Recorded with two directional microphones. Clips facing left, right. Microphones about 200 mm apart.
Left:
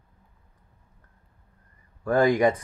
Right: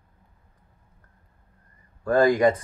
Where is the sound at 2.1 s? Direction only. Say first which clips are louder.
Right 2 dB; 20° left (ahead or behind).